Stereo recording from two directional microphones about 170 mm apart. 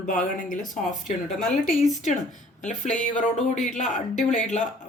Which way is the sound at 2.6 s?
45° left (ahead or behind).